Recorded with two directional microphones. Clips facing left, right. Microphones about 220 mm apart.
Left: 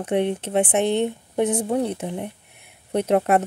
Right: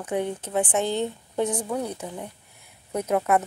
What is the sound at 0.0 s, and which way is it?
Speech, 25° left (ahead or behind).